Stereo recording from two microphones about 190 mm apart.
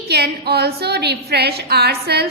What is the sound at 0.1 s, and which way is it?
A woman's voice, 60° right (ahead or behind).